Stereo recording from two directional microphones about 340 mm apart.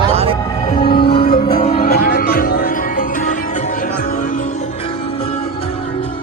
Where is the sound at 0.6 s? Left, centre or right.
Centre.